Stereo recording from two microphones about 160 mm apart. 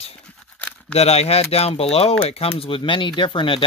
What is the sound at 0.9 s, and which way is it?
Speech, 40° left (ahead or behind).